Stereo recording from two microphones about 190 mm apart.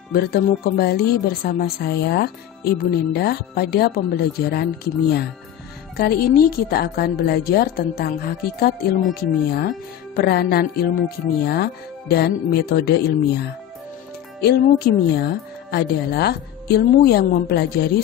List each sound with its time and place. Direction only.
0.1 s speech: 55° left (ahead or behind)
5.9 s speech: 55° left (ahead or behind)